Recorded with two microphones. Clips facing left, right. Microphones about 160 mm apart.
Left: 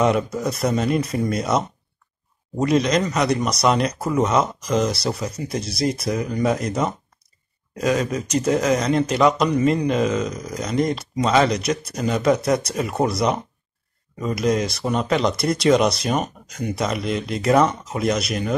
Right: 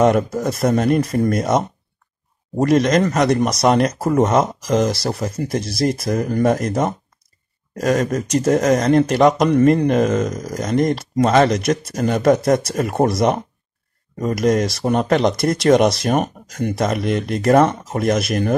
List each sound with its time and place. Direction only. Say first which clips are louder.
0.0 s speech: right 4 dB; 50° right (ahead or behind)
2.6 s speech: right 4 dB; 50° right (ahead or behind)